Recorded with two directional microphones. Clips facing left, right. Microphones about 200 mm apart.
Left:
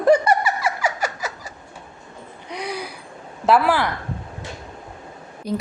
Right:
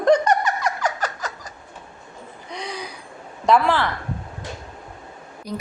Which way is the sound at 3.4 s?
5° left (ahead or behind).